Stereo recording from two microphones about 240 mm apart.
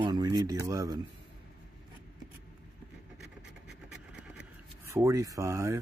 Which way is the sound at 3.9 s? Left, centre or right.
Centre.